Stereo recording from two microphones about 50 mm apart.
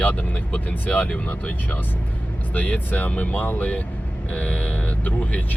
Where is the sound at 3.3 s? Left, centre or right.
Left.